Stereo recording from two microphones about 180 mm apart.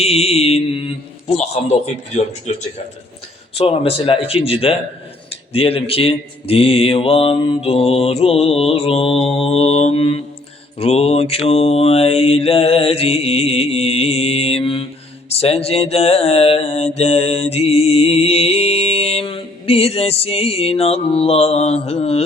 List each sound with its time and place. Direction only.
0.0 s mantra: 35° left (ahead or behind)
3.6 s mantra: 35° left (ahead or behind)